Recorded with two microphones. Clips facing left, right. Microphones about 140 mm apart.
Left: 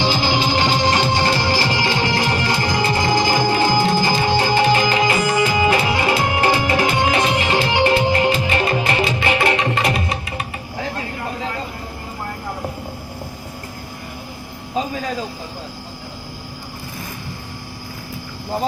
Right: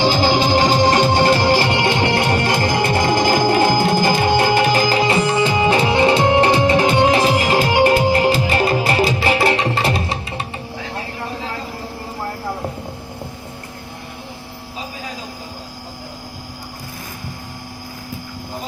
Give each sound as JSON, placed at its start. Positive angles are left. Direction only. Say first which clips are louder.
{"t": 0.0, "sound": "music", "louder": "right 3 dB", "side_deg": -45}